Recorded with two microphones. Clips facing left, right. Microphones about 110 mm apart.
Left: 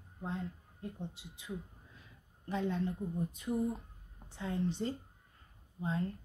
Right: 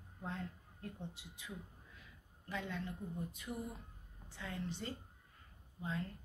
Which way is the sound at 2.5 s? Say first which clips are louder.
Left 8 dB; 30° left (ahead or behind).